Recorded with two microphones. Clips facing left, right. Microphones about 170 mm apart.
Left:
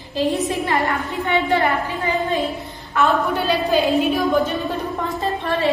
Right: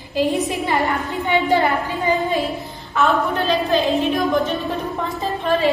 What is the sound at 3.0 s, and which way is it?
A woman's voice, centre (ahead or behind).